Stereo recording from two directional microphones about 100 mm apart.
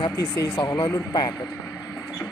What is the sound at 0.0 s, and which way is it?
Speech, 35° left (ahead or behind).